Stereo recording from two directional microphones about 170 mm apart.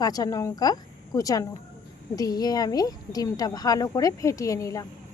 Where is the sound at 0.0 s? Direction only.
20° left (ahead or behind).